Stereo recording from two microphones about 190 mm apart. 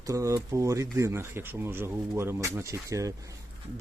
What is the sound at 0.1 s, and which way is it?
Speech, 15° right (ahead or behind).